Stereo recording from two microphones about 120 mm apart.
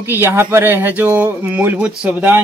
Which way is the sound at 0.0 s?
20° right (ahead or behind).